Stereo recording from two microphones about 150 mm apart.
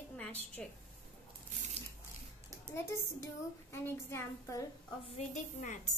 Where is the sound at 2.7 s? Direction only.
15° left (ahead or behind).